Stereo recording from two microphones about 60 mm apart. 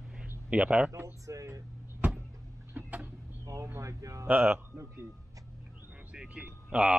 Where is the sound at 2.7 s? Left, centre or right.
Right.